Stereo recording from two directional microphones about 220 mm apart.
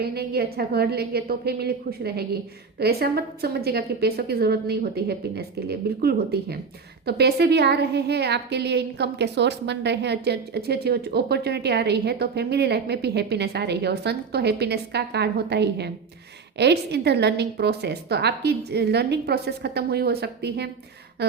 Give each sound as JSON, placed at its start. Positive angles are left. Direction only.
{"t": 0.0, "sound": "a woman's voice", "side_deg": -45}